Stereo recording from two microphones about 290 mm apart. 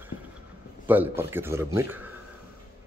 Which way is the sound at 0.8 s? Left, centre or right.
Centre.